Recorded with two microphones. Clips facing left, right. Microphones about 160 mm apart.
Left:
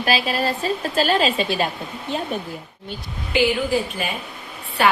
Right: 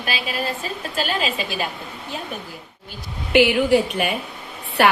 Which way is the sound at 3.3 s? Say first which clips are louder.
Right 4 dB; 70° right (ahead or behind).